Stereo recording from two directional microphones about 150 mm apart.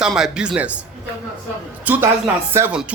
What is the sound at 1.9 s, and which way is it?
Speech, 10° right (ahead or behind).